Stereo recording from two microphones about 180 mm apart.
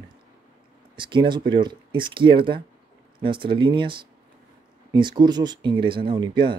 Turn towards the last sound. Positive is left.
turn(degrees=-25)  # may be behind; listen again after turning